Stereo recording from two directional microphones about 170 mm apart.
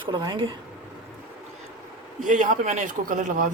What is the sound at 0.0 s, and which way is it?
Speech, 25° right (ahead or behind).